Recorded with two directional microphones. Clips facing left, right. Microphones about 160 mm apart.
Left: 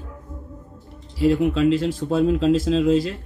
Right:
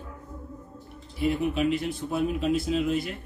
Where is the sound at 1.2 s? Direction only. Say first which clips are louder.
Left 7 dB; 90° left.